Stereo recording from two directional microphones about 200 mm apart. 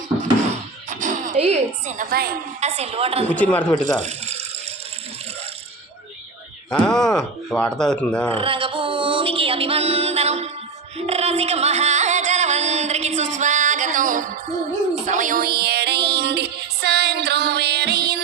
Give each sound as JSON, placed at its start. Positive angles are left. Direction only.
{"t": 0.9, "sound": "a sound", "side_deg": -40}
{"t": 2.6, "sound": "speech", "side_deg": -35}
{"t": 3.2, "sound": "a man's voice", "side_deg": 5}
{"t": 3.5, "sound": "speech", "side_deg": 25}
{"t": 6.7, "sound": "speech", "side_deg": 5}
{"t": 8.4, "sound": "music", "side_deg": -25}